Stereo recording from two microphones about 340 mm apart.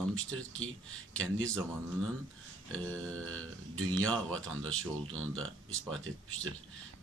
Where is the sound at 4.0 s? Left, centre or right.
Centre.